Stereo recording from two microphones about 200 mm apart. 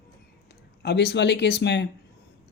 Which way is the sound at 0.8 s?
55° left (ahead or behind).